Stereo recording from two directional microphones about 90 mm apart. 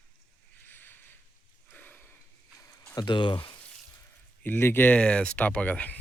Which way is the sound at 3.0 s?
60° left (ahead or behind).